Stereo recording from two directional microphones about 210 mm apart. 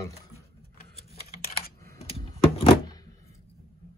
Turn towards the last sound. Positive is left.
turn(degrees=20)  # may be behind; listen again after turning